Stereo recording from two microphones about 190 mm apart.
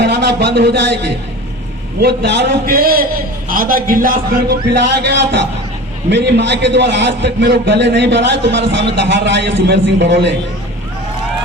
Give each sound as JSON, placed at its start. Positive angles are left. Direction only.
{"t": 0.0, "sound": "a man's voice", "side_deg": -60}
{"t": 4.9, "sound": "a man's voice", "side_deg": -65}